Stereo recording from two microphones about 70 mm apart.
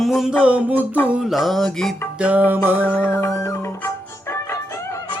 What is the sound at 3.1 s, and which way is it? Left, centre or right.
Music, left.